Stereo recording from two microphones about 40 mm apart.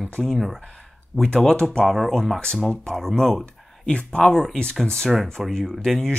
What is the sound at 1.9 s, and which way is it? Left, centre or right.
Speech, centre.